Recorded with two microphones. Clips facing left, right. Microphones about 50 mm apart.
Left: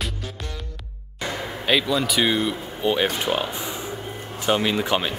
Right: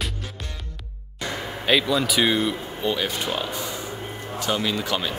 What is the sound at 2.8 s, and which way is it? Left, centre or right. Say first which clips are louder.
Speech: left 4 dB; centre.